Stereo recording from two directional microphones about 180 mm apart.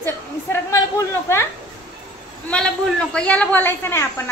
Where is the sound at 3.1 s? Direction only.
10° left (ahead or behind).